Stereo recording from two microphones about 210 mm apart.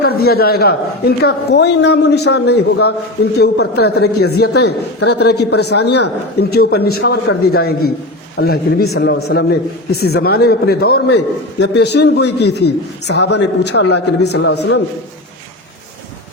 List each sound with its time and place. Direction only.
0.0 s speech: 45° left (ahead or behind)
14.5 s a man's voice: 90° left